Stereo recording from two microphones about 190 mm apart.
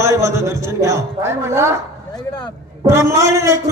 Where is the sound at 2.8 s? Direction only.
15° right (ahead or behind).